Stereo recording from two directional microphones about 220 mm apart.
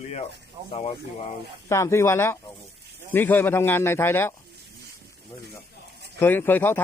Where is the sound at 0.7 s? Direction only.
25° left (ahead or behind).